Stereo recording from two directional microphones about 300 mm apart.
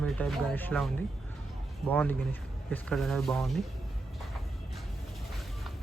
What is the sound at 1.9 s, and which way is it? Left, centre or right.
Speech, centre.